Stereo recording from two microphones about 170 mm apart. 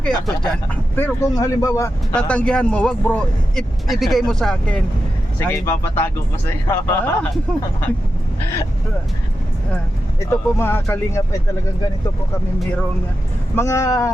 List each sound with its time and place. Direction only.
0.9 s speech: 15° left (ahead or behind)
2.1 s speech: 5° left (ahead or behind)
5.4 s speech: 15° left (ahead or behind)
10.2 s speech: 15° left (ahead or behind)
13.6 s speech: 15° left (ahead or behind)